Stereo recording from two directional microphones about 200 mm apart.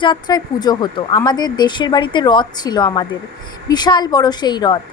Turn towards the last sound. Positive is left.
turn(degrees=20)  # may be behind; listen again after turning